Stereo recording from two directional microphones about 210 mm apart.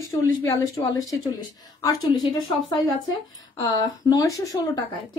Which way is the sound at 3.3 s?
20° left (ahead or behind).